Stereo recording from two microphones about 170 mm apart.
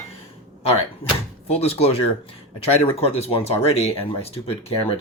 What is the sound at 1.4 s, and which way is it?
Speech, 35° left (ahead or behind).